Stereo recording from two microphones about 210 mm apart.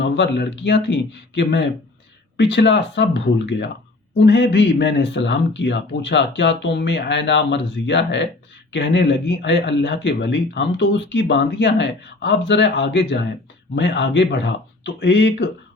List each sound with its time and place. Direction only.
0.0 s speech: 55° left (ahead or behind)